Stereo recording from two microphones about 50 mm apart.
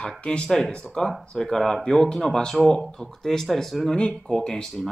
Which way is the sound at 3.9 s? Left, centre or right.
Centre.